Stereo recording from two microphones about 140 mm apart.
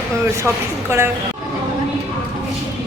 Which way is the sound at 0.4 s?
20° right (ahead or behind).